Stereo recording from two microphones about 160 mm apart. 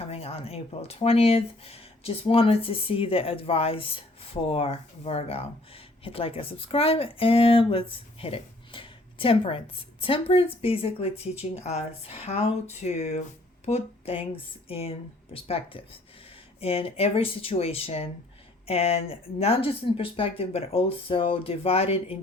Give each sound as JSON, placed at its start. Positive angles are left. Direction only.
{"t": 0.0, "sound": "speech", "side_deg": 40}